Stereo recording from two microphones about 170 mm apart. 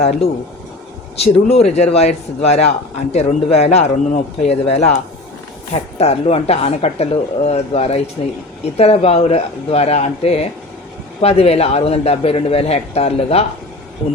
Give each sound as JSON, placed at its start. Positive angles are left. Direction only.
{"t": 0.0, "sound": "a man's voice", "side_deg": 40}
{"t": 6.0, "sound": "a man's voice", "side_deg": 40}